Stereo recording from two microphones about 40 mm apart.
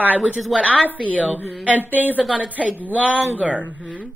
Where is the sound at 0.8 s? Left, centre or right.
Right.